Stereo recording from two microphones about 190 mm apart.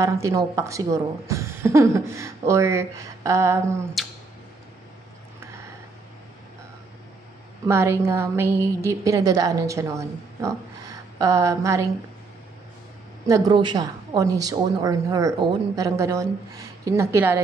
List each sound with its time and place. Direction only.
0.0 s a woman's voice: 15° right (ahead or behind)
4.0 s a sound: centre (ahead or behind)
7.6 s a woman's voice: 15° right (ahead or behind)
13.3 s a woman's voice: 25° right (ahead or behind)